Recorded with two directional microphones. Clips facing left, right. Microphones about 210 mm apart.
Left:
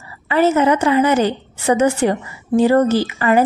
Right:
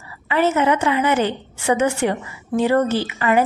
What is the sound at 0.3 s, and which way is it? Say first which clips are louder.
Speech: left 3 dB; 40° left (ahead or behind).